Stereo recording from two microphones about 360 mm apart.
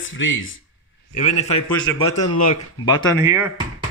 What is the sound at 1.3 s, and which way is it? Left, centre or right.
Speech, centre.